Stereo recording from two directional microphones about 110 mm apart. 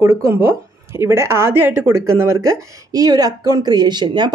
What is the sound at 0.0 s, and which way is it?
A woman's voice, 25° right (ahead or behind).